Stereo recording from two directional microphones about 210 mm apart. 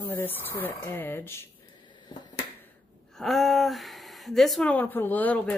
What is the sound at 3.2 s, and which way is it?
Speech, centre (ahead or behind).